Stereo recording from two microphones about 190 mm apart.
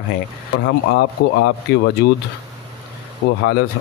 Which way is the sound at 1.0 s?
65° left (ahead or behind).